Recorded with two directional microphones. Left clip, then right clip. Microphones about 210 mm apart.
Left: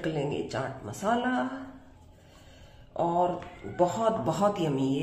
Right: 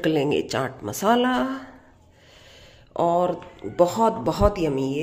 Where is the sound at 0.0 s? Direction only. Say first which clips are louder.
Right 9 dB; 45° right (ahead or behind).